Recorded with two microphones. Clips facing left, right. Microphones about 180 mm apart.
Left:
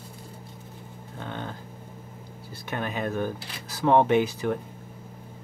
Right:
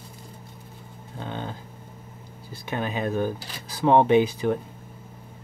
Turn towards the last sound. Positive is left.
turn(degrees=-20)  # may be behind; listen again after turning